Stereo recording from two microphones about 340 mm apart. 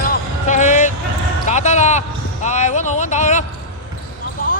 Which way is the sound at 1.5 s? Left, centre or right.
Centre.